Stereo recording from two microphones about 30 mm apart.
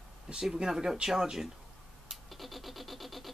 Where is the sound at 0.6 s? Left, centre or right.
Centre.